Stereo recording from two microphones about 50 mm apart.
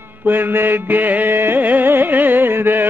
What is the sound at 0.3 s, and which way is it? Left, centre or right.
Mantra, right.